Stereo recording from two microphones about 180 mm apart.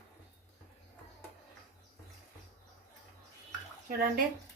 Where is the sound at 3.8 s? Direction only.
55° right (ahead or behind).